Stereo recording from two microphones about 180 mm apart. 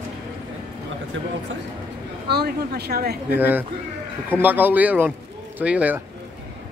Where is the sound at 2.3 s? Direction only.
60° right (ahead or behind).